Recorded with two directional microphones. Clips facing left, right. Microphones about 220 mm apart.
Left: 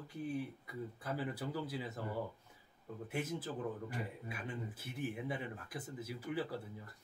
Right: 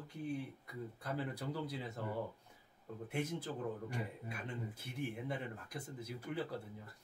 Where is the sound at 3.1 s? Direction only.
5° left (ahead or behind).